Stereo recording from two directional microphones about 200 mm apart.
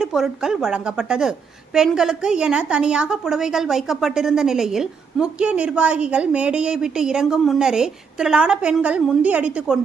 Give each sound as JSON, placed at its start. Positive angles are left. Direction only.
{"t": 0.0, "sound": "a woman's voice", "side_deg": -5}